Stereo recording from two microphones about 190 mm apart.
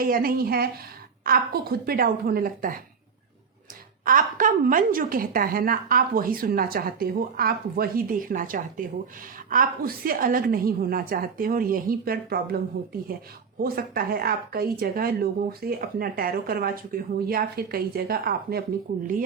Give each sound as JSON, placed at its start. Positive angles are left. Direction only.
{"t": 0.0, "sound": "speech", "side_deg": -50}
{"t": 4.0, "sound": "speech", "side_deg": -45}